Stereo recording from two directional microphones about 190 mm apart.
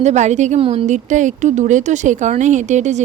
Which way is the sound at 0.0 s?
40° right (ahead or behind).